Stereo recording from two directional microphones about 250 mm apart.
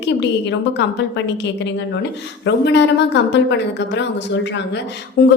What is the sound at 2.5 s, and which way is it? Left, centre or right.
Speech, left.